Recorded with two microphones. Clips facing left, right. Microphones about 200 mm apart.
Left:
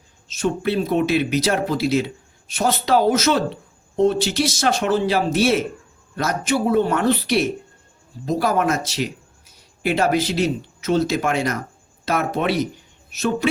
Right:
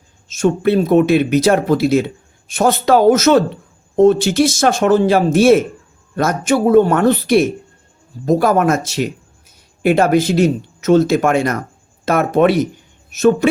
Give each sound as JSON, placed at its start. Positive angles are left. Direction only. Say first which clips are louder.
{"t": 0.3, "sound": "a woman's voice", "louder": "right 7 dB", "side_deg": -50}